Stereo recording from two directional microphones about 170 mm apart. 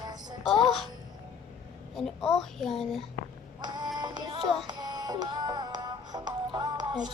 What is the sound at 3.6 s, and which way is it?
Music, 25° right (ahead or behind).